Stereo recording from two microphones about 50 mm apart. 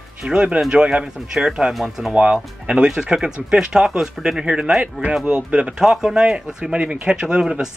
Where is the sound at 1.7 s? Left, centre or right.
Centre.